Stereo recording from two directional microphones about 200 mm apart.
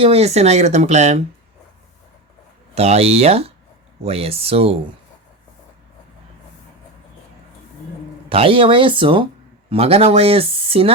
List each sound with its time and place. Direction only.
0.0 s speech: 30° right (ahead or behind)
2.7 s speech: 30° right (ahead or behind)
8.3 s speech: 25° right (ahead or behind)